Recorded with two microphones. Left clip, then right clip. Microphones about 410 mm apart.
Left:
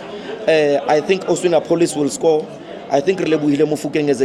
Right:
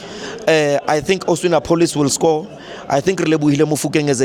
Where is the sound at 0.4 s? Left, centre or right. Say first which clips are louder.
Even; right.